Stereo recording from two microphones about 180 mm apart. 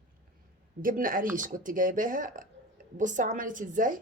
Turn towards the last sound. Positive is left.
turn(degrees=-45)  # may be behind; listen again after turning